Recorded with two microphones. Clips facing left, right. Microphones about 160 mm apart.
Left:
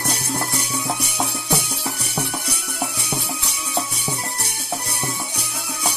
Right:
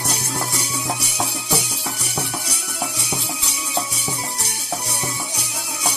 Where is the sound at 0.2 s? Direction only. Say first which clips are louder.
Left 1 dB; 55° left (ahead or behind).